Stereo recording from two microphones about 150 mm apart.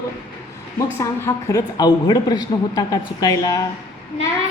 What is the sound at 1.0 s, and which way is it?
A woman's voice, 20° left (ahead or behind).